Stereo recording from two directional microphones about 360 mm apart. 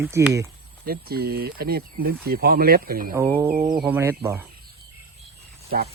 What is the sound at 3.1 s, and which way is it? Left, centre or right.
Speech, centre.